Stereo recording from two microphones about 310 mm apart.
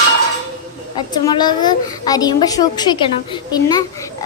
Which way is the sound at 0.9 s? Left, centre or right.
Centre.